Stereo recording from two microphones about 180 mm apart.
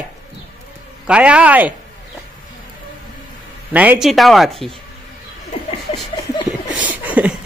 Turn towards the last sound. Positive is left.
turn(degrees=-10)  # may be behind; listen again after turning